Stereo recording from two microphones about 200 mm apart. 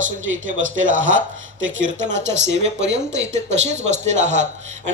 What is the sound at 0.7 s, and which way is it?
Speech, 70° right (ahead or behind).